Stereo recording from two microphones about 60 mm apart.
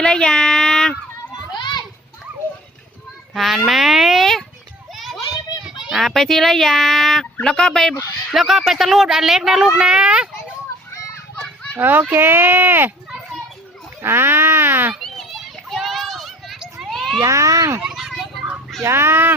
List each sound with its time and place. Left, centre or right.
0.0 s a sound: centre
3.3 s speech: centre
4.9 s children playing: centre
5.9 s speech: centre
11.8 s speech: right
14.0 s a sound: right
14.9 s children playing: centre
16.9 s cat: centre
17.2 s a child's voice: right
17.7 s children playing: centre
18.8 s speech: right